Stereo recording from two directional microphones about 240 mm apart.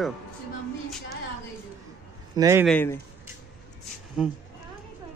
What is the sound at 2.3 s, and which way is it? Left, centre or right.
Speech, centre.